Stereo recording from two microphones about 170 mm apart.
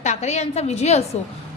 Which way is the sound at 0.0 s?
40° left (ahead or behind).